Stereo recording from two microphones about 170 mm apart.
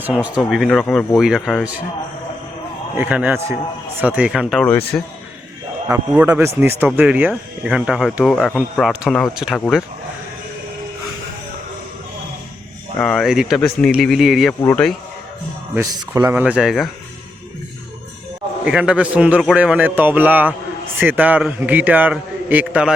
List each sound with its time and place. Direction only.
0.0 s speech: 5° right (ahead or behind)
3.0 s speech: 10° right (ahead or behind)
4.9 s a man's voice: 15° left (ahead or behind)
5.9 s speech: 10° right (ahead or behind); by 9.8 s 5° left (ahead or behind)
13.0 s speech: 5° left (ahead or behind)
15.7 s speech: 20° right (ahead or behind)
16.3 s speech: 10° right (ahead or behind)
18.6 s speech: 5° right (ahead or behind)